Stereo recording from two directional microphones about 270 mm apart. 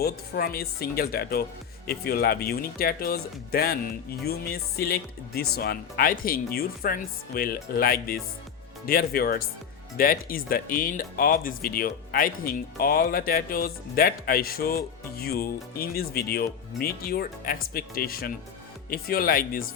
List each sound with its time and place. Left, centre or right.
0.0 s speech: left